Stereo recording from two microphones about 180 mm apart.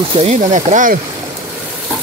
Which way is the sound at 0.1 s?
35° right (ahead or behind).